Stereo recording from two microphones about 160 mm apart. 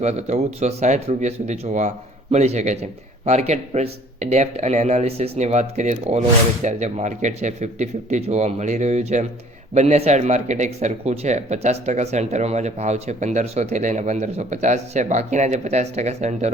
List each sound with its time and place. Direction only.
0.0 s a man's voice: 45° right (ahead or behind)